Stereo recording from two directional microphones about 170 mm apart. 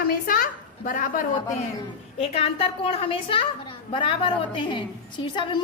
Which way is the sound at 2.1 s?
35° left (ahead or behind).